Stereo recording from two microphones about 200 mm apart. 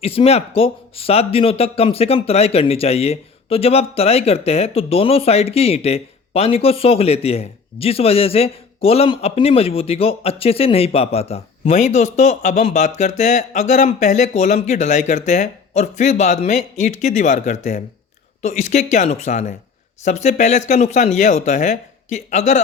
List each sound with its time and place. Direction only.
0.0 s speech: 30° left (ahead or behind)